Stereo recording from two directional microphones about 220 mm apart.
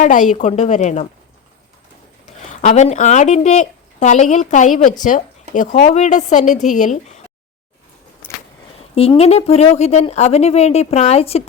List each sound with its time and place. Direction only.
0.0 s a woman's voice: 35° left (ahead or behind)
2.5 s a woman's voice: 35° left (ahead or behind)
9.0 s speech: 25° left (ahead or behind)